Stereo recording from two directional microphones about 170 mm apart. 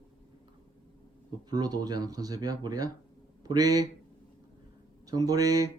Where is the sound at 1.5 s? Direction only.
25° right (ahead or behind).